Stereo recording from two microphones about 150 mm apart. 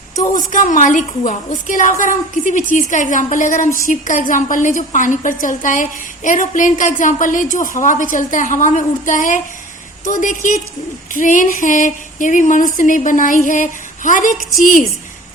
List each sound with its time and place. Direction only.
0.3 s a woman's voice: 60° left (ahead or behind)